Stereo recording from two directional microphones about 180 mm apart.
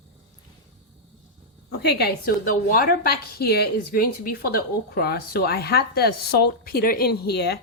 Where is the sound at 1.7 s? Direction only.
65° left (ahead or behind).